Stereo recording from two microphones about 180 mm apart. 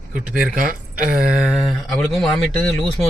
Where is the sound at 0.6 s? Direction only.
50° right (ahead or behind).